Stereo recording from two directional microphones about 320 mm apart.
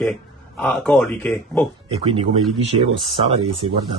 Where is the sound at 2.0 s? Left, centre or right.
Centre.